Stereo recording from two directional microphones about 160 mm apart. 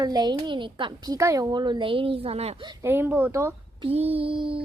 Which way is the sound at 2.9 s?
10° right (ahead or behind).